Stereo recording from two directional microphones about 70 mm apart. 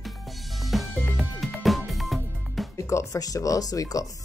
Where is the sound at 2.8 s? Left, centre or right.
Left.